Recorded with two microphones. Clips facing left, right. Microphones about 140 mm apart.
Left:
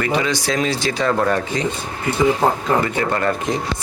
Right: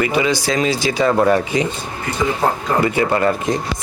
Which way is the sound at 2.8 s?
10° right (ahead or behind).